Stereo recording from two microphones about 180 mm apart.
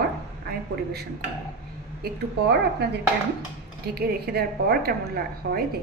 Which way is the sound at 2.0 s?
70° right (ahead or behind).